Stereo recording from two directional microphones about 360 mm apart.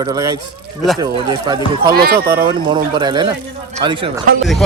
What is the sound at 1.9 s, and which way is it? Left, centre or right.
Speech, right.